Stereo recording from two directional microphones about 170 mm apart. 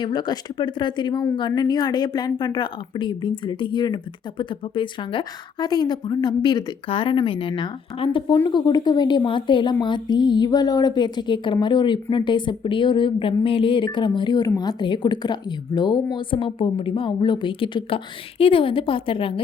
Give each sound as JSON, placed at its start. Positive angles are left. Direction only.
{"t": 0.0, "sound": "a woman's voice", "side_deg": 25}